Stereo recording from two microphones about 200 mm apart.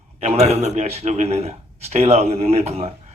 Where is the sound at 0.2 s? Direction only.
35° right (ahead or behind).